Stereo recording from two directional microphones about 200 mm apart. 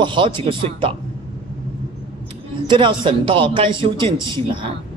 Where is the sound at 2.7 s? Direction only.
25° right (ahead or behind).